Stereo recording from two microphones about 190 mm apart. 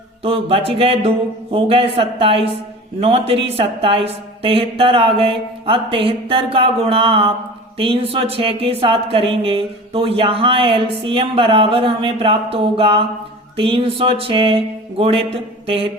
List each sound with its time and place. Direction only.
0.2 s music: 30° right (ahead or behind)
1.5 s a woman's voice: 30° right (ahead or behind)
15.6 s mantra: 30° right (ahead or behind)